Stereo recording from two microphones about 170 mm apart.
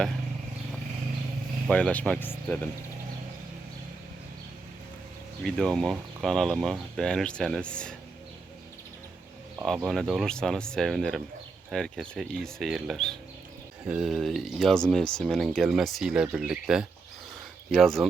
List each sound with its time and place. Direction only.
1.7 s speech: 10° left (ahead or behind)
5.4 s speech: 5° left (ahead or behind)
9.6 s speech: centre (ahead or behind)